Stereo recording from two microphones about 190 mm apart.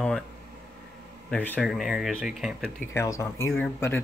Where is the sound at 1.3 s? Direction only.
5° left (ahead or behind).